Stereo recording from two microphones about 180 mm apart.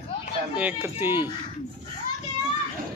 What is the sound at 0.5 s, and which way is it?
Speech, 10° right (ahead or behind).